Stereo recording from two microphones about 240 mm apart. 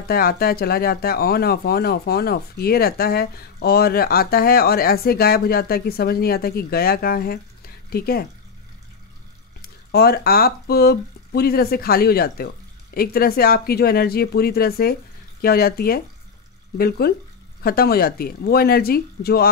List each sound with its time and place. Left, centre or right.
0.1 s speech: left
9.6 s speech: left